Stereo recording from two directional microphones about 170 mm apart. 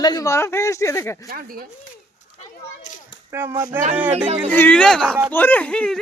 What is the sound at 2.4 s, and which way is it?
Children playing, 45° left (ahead or behind).